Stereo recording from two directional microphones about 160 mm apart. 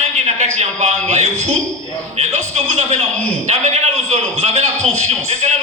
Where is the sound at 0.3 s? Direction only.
45° right (ahead or behind).